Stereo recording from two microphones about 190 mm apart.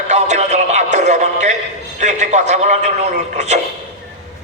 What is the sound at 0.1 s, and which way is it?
Music, 35° right (ahead or behind).